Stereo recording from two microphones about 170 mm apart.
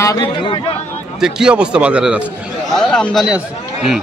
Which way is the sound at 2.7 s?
5° left (ahead or behind).